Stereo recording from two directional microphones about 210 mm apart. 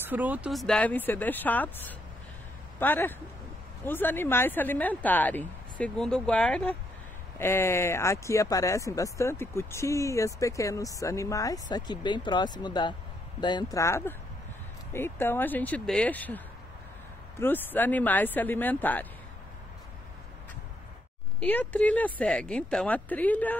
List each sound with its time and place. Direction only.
0.0 s speech: 10° right (ahead or behind); by 19.0 s 10° left (ahead or behind)
21.4 s speech: 5° left (ahead or behind)